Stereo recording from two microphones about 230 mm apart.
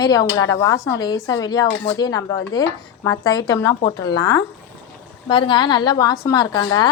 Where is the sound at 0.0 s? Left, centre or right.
Centre.